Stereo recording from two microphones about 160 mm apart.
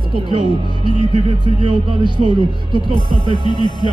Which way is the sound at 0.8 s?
30° right (ahead or behind).